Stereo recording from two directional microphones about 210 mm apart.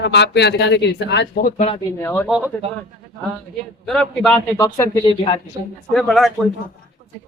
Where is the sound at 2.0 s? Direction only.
10° left (ahead or behind).